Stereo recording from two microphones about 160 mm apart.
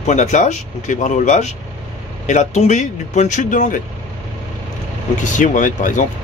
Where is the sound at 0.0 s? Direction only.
50° left (ahead or behind).